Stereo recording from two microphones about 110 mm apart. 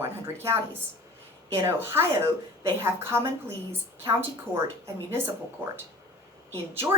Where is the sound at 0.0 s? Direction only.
25° right (ahead or behind).